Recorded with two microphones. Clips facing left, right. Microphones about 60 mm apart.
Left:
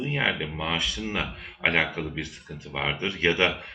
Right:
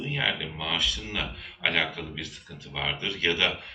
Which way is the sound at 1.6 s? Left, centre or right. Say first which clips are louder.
Left 3 dB; left.